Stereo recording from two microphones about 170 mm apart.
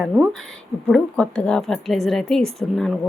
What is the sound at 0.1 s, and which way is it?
A woman's voice, centre (ahead or behind).